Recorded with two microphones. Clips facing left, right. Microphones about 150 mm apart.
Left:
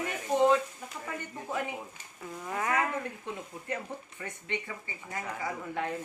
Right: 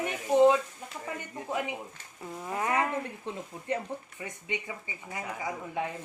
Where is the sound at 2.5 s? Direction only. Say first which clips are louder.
Right 1 dB; 25° right (ahead or behind).